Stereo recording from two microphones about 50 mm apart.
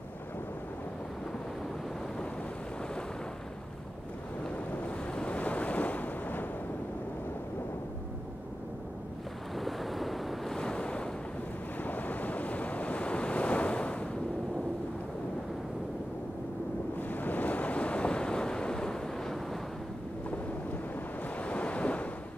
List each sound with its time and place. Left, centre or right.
4.7 s waves: left
9.6 s waves: centre
10.6 s waves: centre
11.8 s waves: left
17.1 s waves: left; by 19.3 s centre
21.4 s waves: left